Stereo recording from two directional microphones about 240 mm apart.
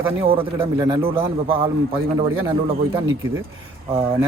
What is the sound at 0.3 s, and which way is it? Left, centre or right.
A man's voice, right.